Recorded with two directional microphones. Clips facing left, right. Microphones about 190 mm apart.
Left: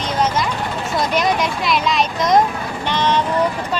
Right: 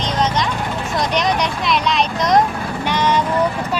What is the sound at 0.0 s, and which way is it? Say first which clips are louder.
Vehicle: even; 10° left (ahead or behind).